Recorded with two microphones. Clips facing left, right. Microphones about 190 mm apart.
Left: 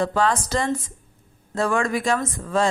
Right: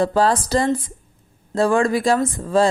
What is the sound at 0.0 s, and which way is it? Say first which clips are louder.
Speech: right 4 dB; 35° right (ahead or behind).